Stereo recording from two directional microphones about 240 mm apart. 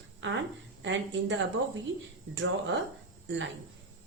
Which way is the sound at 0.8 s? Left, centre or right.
Right.